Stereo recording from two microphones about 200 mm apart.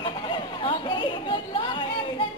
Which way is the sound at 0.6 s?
25° left (ahead or behind).